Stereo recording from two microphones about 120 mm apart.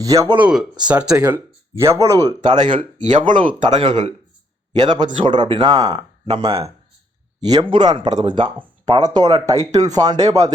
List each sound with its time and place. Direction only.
0.0 s speech: 30° right (ahead or behind)
0.3 s speech: 10° right (ahead or behind)
1.3 s speech: 25° right (ahead or behind)
2.6 s speech: 40° right (ahead or behind)
6.2 s speech: 50° right (ahead or behind)
7.4 s speech: 40° right (ahead or behind)